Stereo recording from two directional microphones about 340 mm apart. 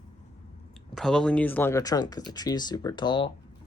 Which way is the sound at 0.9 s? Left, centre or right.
Centre.